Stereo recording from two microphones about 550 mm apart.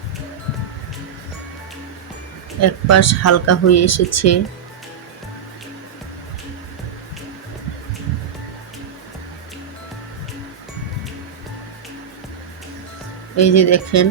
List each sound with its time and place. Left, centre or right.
2.6 s speech: left
13.3 s speech: left